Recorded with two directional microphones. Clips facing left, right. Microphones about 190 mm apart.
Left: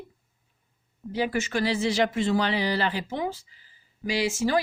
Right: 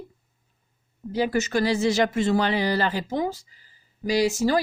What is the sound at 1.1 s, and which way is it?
Speech, 40° right (ahead or behind).